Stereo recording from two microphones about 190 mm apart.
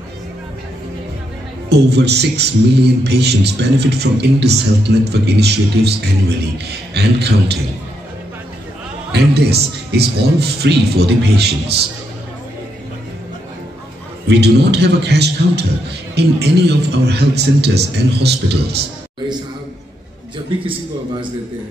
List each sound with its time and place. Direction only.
1.7 s a man's voice: 60° right (ahead or behind)
9.1 s a man's voice: 60° right (ahead or behind)
14.2 s a man's voice: 60° right (ahead or behind)